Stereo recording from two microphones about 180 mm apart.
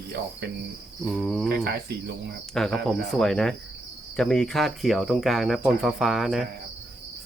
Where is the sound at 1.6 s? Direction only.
60° right (ahead or behind).